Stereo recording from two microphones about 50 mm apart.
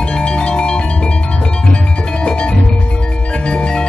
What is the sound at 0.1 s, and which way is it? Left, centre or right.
Music, centre.